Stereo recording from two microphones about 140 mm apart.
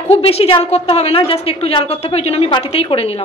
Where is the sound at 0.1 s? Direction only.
45° left (ahead or behind).